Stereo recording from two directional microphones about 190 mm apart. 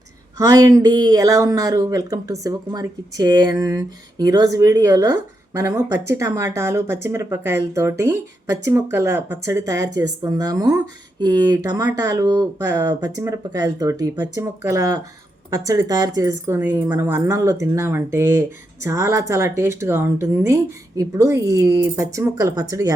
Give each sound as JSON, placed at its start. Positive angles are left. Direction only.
{"t": 0.3, "sound": "speech", "side_deg": -15}